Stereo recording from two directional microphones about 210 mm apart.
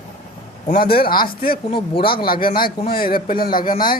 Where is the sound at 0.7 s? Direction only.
45° left (ahead or behind).